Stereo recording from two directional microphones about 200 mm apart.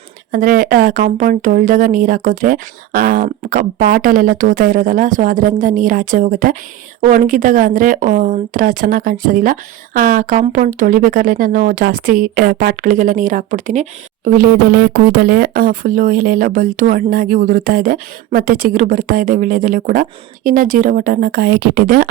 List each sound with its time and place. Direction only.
0.3 s speech: 45° right (ahead or behind)
14.3 s speech: 45° right (ahead or behind)